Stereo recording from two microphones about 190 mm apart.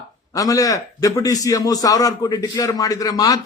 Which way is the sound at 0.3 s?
20° left (ahead or behind).